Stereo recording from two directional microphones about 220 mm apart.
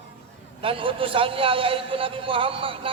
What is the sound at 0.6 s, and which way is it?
A man's voice, 25° right (ahead or behind).